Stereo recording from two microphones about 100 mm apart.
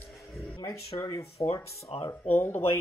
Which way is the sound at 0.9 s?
35° left (ahead or behind).